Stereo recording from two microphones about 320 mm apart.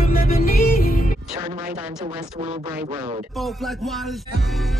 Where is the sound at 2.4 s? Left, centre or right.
Centre.